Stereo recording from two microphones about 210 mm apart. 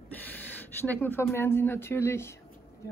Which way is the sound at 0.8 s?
10° left (ahead or behind).